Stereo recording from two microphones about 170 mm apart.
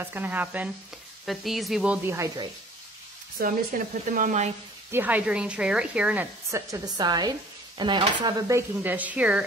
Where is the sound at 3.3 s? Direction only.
55° right (ahead or behind).